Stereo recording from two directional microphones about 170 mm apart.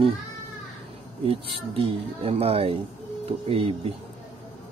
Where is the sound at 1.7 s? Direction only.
35° right (ahead or behind).